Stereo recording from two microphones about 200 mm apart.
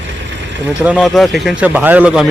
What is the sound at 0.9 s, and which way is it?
Speech, centre (ahead or behind).